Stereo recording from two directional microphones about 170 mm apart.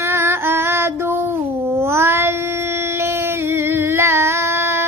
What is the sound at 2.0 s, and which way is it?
Cat, 15° right (ahead or behind).